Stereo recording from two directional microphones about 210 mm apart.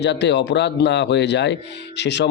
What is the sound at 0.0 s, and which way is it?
A man's voice, 55° left (ahead or behind).